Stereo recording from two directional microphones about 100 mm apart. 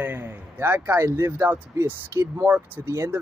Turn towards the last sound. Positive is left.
turn(degrees=-25)  # may be behind; listen again after turning